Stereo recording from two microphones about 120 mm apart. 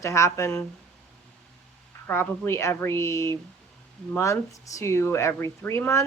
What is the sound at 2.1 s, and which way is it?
Speech, 20° left (ahead or behind).